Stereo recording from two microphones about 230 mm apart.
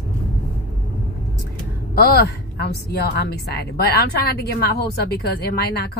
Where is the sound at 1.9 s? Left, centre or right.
Left.